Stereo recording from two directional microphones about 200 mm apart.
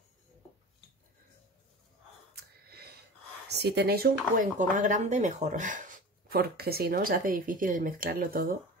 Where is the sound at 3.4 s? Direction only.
55° right (ahead or behind).